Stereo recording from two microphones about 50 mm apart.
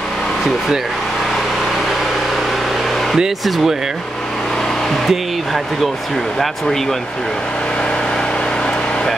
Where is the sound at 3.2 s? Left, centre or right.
Centre.